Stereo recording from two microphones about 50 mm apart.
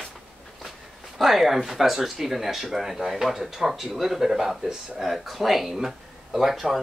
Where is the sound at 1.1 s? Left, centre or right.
Centre.